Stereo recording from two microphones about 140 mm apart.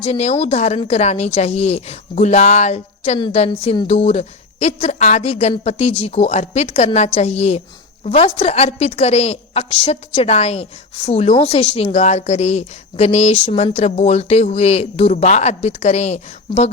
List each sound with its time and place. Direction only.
0.0 s a woman's voice: 45° left (ahead or behind)
13.7 s a woman's voice: 55° left (ahead or behind)